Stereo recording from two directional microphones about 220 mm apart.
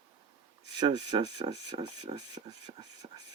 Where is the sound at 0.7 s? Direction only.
20° right (ahead or behind).